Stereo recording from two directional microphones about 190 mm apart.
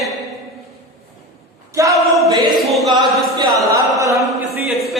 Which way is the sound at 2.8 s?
25° right (ahead or behind).